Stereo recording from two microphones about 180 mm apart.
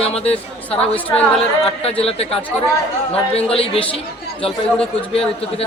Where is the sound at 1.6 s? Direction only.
35° left (ahead or behind).